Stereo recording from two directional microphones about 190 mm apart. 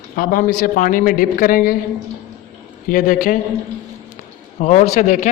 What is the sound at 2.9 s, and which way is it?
Speech, 45° left (ahead or behind).